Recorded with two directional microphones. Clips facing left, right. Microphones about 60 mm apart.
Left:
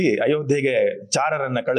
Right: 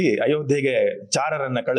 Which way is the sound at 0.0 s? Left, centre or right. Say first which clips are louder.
Left 1 dB; centre.